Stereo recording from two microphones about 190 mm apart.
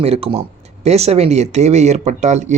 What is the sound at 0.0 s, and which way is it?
Speech, 30° right (ahead or behind).